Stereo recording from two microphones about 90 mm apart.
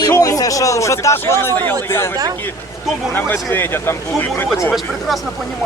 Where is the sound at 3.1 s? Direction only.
25° left (ahead or behind).